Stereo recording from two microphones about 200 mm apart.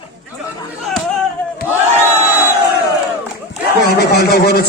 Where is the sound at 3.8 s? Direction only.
55° left (ahead or behind).